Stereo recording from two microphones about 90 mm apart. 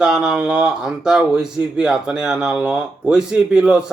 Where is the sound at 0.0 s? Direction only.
5° right (ahead or behind).